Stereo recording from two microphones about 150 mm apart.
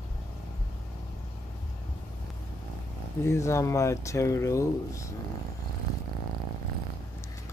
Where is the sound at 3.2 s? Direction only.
20° left (ahead or behind).